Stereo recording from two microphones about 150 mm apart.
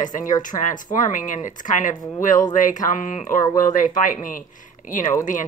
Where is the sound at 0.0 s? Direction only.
60° left (ahead or behind).